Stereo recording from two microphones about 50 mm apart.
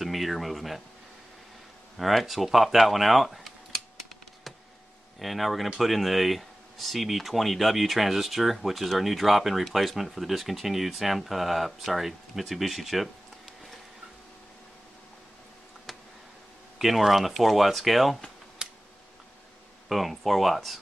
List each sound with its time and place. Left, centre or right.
0.0 s speech: centre
2.0 s speech: centre
5.2 s speech: centre
15.9 s a sound: centre
16.7 s speech: centre
18.6 s computer keyboard: centre
19.9 s speech: centre